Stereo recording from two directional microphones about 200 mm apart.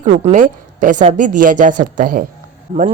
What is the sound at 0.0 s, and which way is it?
A woman's voice, 35° right (ahead or behind).